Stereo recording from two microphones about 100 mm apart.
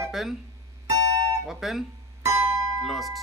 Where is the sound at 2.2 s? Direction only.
25° right (ahead or behind).